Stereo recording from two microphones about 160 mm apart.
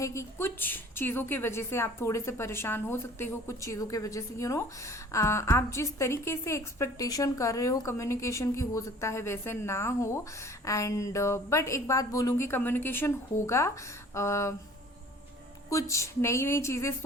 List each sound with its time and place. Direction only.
0.0 s a woman's voice: 20° left (ahead or behind)
15.7 s a woman's voice: 20° left (ahead or behind)